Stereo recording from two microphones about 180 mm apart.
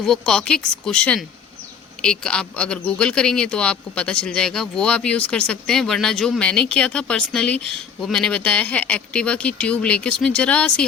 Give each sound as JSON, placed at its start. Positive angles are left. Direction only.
{"t": 0.0, "sound": "speech", "side_deg": 0}